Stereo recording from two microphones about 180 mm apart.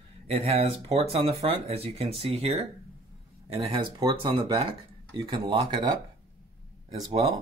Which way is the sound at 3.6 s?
25° right (ahead or behind).